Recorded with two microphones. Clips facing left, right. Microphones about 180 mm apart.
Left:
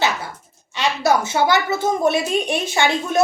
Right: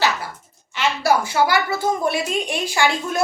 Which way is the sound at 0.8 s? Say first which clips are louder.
Left 1 dB; 20° left (ahead or behind).